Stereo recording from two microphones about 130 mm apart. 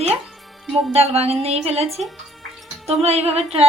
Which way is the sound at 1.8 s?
Centre (ahead or behind).